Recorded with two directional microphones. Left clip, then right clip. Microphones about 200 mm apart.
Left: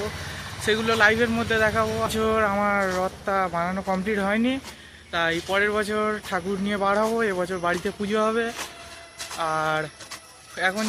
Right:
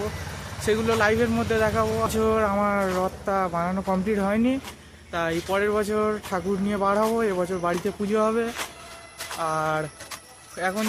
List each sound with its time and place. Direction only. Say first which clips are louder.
0.6 s speech: left 2 dB; 5° right (ahead or behind)